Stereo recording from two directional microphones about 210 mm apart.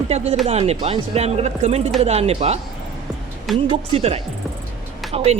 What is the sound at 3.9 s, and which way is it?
Speech, 30° right (ahead or behind).